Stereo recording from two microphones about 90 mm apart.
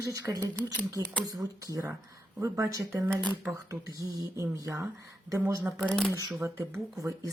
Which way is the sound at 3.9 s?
40° right (ahead or behind).